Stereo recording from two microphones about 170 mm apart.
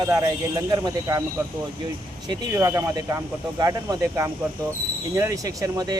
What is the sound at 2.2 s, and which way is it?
Speech, 20° right (ahead or behind).